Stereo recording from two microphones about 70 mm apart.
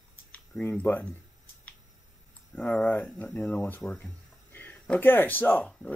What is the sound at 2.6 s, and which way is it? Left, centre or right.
Speech, left.